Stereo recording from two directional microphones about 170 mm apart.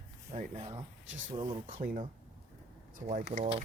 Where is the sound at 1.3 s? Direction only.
30° right (ahead or behind).